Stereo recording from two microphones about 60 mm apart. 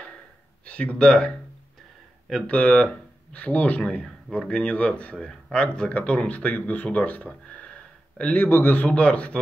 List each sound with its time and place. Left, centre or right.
0.7 s speech: left
2.4 s speech: left
4.0 s speech: centre; by 7.2 s left
7.2 s a sound: centre
8.5 s a man's voice: left
8.7 s speech: left